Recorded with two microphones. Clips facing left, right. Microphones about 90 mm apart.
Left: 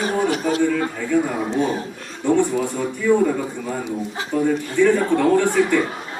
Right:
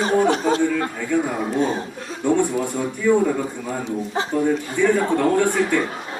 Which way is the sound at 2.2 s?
15° right (ahead or behind).